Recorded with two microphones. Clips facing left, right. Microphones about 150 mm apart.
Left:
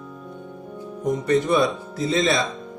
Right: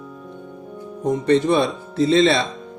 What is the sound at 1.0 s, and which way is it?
Speech, 30° right (ahead or behind).